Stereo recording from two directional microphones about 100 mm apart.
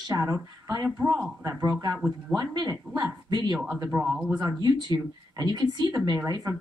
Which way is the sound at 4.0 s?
10° right (ahead or behind).